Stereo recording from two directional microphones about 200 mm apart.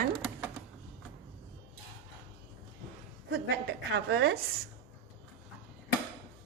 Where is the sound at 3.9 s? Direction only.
65° right (ahead or behind).